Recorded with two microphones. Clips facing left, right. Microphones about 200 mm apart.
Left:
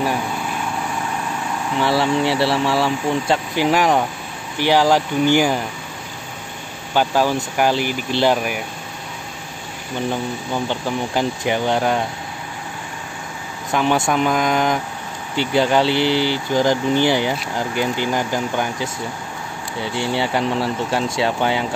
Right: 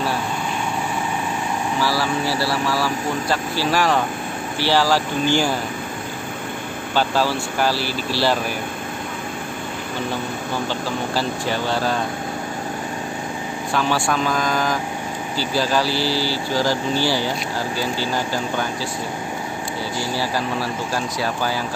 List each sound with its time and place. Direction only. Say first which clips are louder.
1.8 s speech: left 6 dB; 25° left (ahead or behind)
6.9 s speech: left 3 dB; 15° left (ahead or behind)
10.7 s speech: left 2 dB; 15° left (ahead or behind)
13.7 s speech: left 3 dB; 20° left (ahead or behind)
20.0 s speech: left 5 dB; 25° left (ahead or behind)